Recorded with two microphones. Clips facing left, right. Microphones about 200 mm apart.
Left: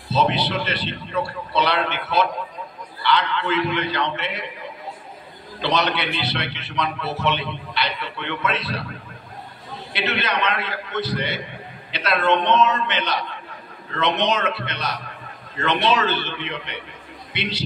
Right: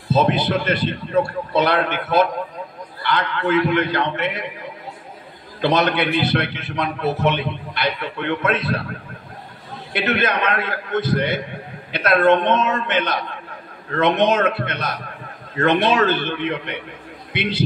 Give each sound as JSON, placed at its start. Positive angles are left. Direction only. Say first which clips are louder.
{"t": 0.1, "sound": "a man's voice", "louder": "right 3 dB", "side_deg": -50}
{"t": 5.6, "sound": "a man's voice", "louder": "right 4 dB", "side_deg": -50}
{"t": 9.9, "sound": "a man's voice", "louder": "right 4 dB", "side_deg": -50}